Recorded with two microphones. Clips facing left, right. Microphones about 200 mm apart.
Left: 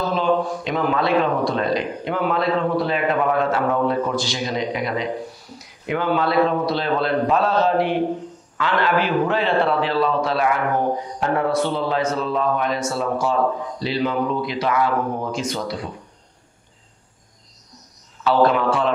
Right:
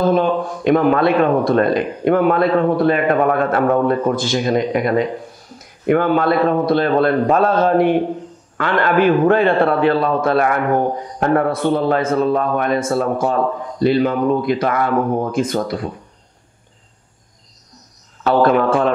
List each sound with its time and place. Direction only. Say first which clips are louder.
0.0 s a man's voice: right 4 dB; 55° right (ahead or behind)
18.2 s a man's voice: right 3 dB; 50° right (ahead or behind)